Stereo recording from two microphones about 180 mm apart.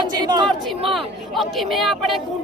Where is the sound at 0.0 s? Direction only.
25° right (ahead or behind).